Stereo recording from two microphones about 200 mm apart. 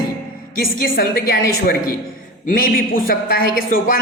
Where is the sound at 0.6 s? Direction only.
45° left (ahead or behind).